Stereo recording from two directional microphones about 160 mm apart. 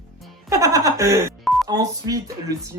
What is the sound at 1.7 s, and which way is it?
Speech, 25° right (ahead or behind).